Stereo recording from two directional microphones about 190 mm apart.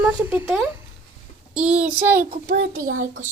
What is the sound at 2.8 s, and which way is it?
Speech, 45° right (ahead or behind).